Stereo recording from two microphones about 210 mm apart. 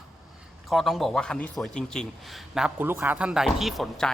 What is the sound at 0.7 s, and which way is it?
A man's voice, centre (ahead or behind).